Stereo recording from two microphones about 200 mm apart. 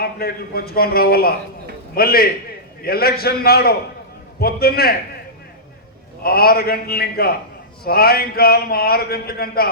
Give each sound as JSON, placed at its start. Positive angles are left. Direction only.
{"t": 0.0, "sound": "a man's voice", "side_deg": 50}
{"t": 6.2, "sound": "a man's voice", "side_deg": 50}